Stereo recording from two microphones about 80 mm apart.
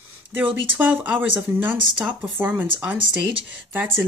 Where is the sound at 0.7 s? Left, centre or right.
Right.